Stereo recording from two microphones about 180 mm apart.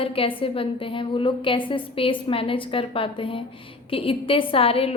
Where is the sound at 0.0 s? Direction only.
30° left (ahead or behind).